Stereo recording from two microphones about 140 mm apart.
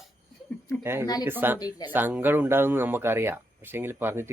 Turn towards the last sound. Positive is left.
turn(degrees=-15)  # may be behind; listen again after turning